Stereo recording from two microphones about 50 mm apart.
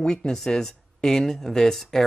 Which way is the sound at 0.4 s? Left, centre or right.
Centre.